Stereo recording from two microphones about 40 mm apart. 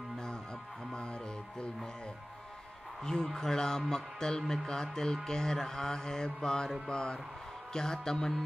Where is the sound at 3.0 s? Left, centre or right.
Centre.